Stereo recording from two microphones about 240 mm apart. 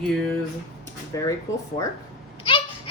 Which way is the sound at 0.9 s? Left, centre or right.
Centre.